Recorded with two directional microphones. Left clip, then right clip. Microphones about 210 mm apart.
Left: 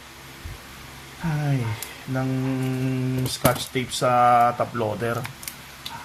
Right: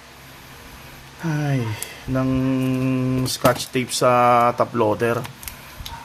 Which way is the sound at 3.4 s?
50° right (ahead or behind).